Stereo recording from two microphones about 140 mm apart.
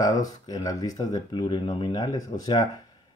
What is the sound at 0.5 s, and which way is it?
Speech, 25° left (ahead or behind).